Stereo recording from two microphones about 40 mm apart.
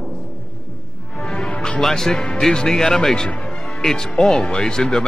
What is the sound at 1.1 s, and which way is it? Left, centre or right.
Music, left.